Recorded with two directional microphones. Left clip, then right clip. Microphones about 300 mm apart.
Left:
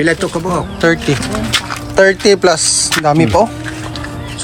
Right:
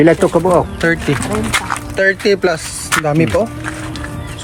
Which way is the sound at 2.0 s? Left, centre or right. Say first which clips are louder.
Left 4 dB; centre.